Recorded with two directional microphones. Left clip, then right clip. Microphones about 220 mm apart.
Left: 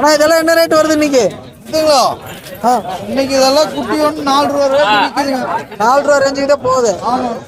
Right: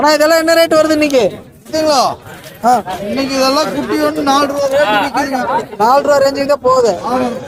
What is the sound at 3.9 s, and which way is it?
Speech, 5° right (ahead or behind).